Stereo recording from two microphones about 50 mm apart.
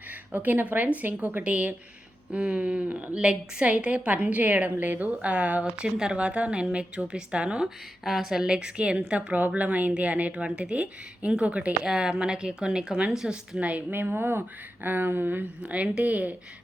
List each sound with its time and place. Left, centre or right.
0.3 s a woman's voice: right
5.6 s a woman's voice: centre
7.6 s a woman's voice: centre; by 11.9 s right
11.9 s a woman's voice: centre
13.6 s a woman's voice: right
13.9 s a woman's voice: right
15.6 s a woman's voice: right